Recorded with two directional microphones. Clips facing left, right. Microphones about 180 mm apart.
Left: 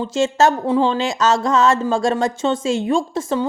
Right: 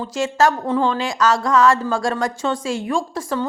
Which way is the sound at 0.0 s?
25° left (ahead or behind).